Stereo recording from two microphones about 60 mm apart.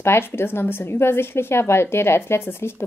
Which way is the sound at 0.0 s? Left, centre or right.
Left.